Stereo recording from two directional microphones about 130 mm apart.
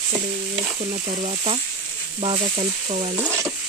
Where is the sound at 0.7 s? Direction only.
45° right (ahead or behind).